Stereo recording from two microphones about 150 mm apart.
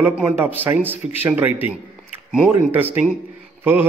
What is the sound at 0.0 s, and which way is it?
Speech, 10° right (ahead or behind).